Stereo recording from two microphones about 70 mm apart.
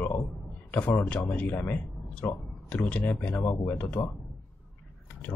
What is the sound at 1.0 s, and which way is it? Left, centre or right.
A man's voice, left.